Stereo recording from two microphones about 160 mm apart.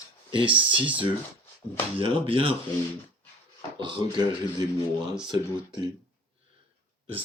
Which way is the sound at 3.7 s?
30° right (ahead or behind).